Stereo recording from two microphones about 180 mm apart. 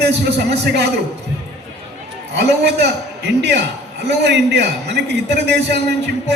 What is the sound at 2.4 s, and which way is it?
A man's voice, 70° right (ahead or behind).